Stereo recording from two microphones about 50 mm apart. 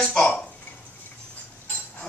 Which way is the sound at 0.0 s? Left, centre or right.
Centre.